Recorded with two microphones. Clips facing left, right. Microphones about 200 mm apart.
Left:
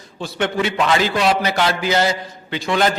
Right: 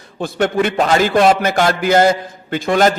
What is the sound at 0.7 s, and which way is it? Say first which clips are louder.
A man's voice: right 4 dB; 40° right (ahead or behind).